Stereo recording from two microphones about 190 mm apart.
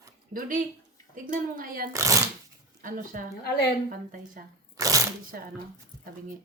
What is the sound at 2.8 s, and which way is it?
A woman's voice, 45° right (ahead or behind).